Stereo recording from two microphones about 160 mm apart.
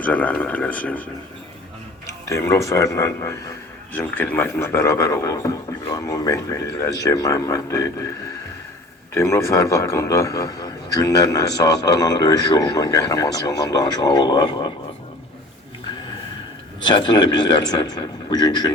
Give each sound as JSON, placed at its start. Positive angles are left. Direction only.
{"t": 0.0, "sound": "a man's voice", "side_deg": 10}
{"t": 9.1, "sound": "a man's voice", "side_deg": 15}
{"t": 16.8, "sound": "a man's voice", "side_deg": 30}